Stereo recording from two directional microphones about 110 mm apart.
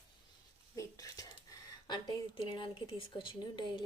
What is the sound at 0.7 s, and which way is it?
A woman's voice, 30° left (ahead or behind).